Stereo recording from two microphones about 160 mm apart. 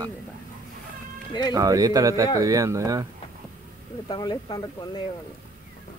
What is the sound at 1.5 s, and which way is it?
Speech, 20° right (ahead or behind).